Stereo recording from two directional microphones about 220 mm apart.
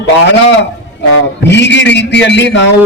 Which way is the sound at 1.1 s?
50° left (ahead or behind).